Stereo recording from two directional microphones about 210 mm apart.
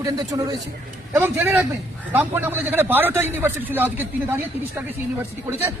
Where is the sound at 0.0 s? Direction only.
15° right (ahead or behind).